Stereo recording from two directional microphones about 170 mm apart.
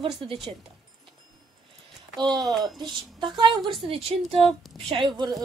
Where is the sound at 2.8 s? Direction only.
25° right (ahead or behind).